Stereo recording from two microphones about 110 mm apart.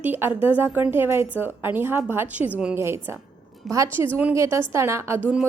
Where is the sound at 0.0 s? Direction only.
15° right (ahead or behind).